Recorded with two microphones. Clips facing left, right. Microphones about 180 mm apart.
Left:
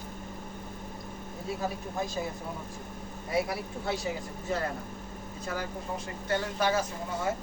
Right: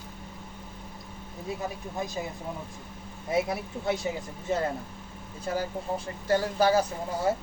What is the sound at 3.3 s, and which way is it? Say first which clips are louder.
Speech: right 2 dB; 20° right (ahead or behind).